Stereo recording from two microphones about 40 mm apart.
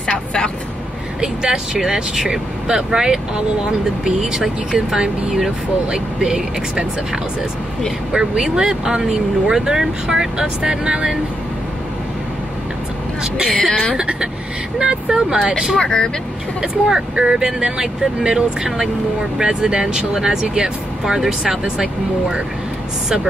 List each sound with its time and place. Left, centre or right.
1.2 s speech: centre
8.1 s speech: right
13.6 s speech: left
13.9 s speech: right
15.8 s speech: centre
16.6 s speech: centre